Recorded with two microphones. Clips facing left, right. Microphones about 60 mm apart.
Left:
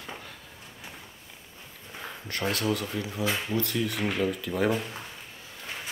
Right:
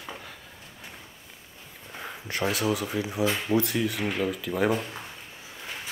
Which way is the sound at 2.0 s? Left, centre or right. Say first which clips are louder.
Right 3 dB; centre.